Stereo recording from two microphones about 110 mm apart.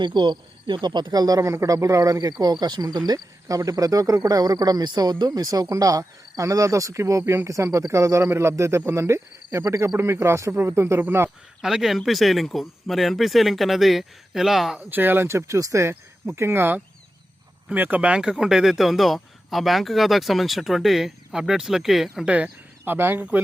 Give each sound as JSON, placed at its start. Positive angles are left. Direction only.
{"t": 0.0, "sound": "speech", "side_deg": -45}
{"t": 11.6, "sound": "speech", "side_deg": -5}
{"t": 14.8, "sound": "speech", "side_deg": -15}